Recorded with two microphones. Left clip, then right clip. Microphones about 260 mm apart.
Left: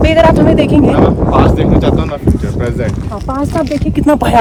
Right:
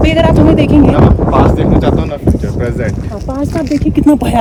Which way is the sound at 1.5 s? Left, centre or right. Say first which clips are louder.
Even; centre.